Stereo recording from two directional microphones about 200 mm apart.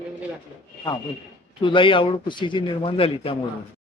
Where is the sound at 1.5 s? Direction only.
25° left (ahead or behind).